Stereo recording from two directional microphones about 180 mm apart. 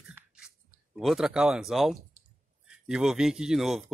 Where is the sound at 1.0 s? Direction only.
Centre (ahead or behind).